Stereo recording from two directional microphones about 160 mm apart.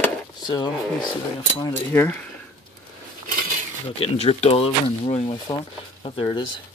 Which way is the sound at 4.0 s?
40° left (ahead or behind).